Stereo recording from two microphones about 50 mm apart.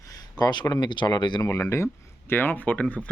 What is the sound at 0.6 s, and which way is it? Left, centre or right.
Speech, left.